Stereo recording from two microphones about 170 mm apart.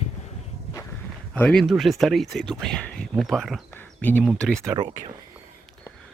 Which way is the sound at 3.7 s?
10° left (ahead or behind).